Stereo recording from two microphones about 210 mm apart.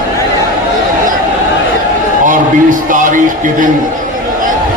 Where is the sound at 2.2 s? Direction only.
40° right (ahead or behind).